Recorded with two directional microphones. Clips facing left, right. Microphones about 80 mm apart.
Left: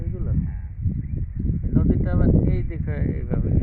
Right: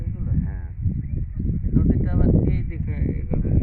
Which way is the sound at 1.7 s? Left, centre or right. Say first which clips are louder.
Even; left.